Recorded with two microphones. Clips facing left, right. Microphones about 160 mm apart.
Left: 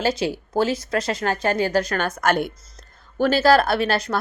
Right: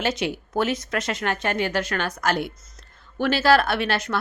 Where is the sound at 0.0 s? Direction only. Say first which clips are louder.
Left 3 dB; 35° left (ahead or behind); by 2.5 s 50° left (ahead or behind).